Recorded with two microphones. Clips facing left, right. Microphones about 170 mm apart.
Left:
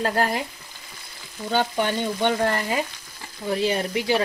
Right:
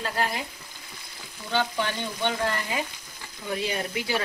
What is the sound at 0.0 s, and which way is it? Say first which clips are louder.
Frying: left 6 dB; 45° left (ahead or behind).